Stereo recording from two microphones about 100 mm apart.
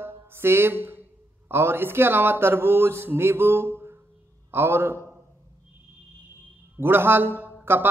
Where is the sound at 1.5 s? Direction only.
20° right (ahead or behind).